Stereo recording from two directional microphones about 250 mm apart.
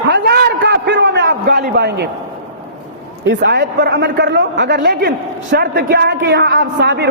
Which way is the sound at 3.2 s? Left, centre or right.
Right.